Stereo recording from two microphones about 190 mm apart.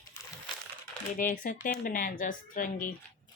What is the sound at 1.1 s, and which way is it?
Speech, 45° left (ahead or behind).